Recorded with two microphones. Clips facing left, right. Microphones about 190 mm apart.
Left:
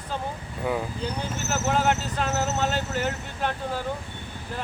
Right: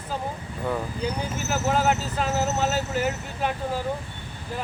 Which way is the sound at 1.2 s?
10° right (ahead or behind).